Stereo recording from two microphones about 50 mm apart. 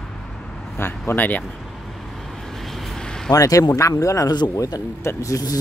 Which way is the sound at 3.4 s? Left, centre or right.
Left.